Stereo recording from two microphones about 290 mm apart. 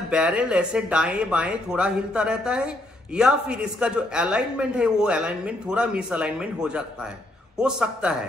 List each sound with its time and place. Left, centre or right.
0.1 s speech: centre